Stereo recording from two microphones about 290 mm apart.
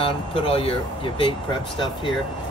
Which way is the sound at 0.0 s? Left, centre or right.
Centre.